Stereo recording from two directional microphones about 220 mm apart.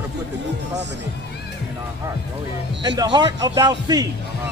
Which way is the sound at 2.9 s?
20° right (ahead or behind).